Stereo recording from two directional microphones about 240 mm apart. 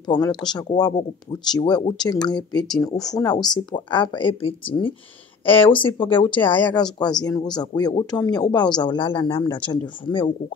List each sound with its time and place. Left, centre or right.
0.0 s speech: centre